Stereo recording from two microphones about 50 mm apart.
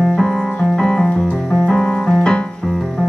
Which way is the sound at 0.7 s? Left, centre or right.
Centre.